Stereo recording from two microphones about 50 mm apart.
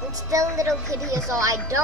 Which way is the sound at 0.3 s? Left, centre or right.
Right.